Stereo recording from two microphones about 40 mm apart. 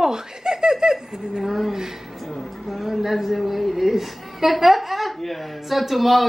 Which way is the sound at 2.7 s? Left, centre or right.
Centre.